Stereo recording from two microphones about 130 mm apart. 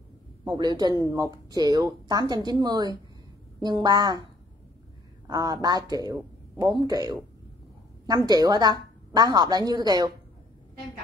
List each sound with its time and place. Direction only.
0.6 s a woman's voice: 35° right (ahead or behind)
5.2 s a woman's voice: 30° right (ahead or behind)